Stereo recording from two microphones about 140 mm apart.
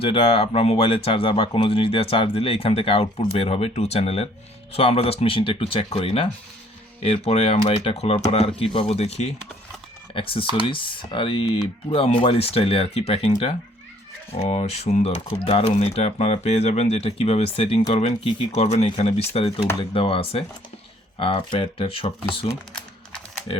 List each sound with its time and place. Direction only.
0.0 s speech: 45° left (ahead or behind)
14.4 s speech: 50° left (ahead or behind)
17.8 s speech: 60° left (ahead or behind); by 22.4 s 40° left (ahead or behind)